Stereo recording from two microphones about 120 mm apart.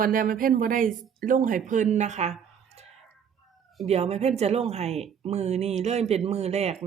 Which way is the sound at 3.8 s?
60° right (ahead or behind).